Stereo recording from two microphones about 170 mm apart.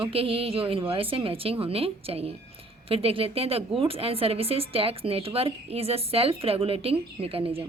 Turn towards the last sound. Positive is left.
turn(degrees=-35)  # may be behind; listen again after turning